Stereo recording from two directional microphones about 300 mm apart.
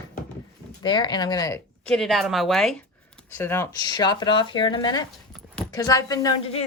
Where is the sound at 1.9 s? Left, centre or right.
Centre.